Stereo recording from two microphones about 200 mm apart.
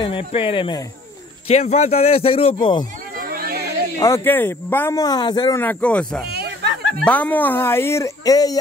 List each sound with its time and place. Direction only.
0.0 s speech: 25° left (ahead or behind)
3.2 s music: 50° right (ahead or behind)
4.0 s speech: 10° left (ahead or behind)
5.6 s speech: 10° left (ahead or behind)
6.2 s a sound: 55° right (ahead or behind)
7.1 s speech: 10° left (ahead or behind)